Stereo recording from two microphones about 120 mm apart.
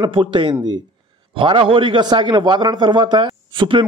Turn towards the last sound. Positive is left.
turn(degrees=-45)  # may be behind; listen again after turning